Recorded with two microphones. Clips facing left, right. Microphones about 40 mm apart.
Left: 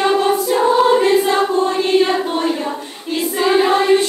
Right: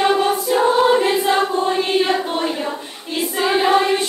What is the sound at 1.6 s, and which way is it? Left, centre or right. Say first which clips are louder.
Choir: left 3 dB; centre.